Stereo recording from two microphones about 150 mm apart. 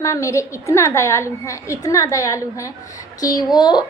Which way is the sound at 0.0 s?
20° left (ahead or behind).